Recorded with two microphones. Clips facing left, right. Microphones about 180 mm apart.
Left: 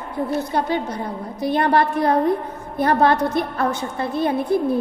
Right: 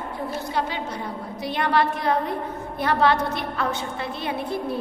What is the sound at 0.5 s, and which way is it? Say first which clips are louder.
A woman's voice: left 3 dB; 50° left (ahead or behind).